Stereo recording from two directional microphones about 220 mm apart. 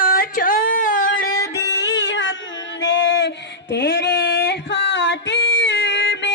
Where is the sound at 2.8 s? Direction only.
55° left (ahead or behind).